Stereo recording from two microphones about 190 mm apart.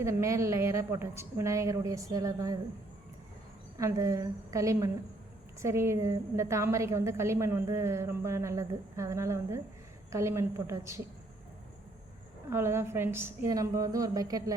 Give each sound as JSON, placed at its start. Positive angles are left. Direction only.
{"t": 0.0, "sound": "a woman's voice", "side_deg": -15}
{"t": 3.8, "sound": "a woman's voice", "side_deg": -15}
{"t": 12.5, "sound": "a woman's voice", "side_deg": -15}